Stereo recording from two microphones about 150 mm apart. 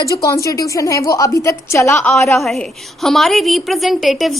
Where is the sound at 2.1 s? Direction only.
Centre (ahead or behind).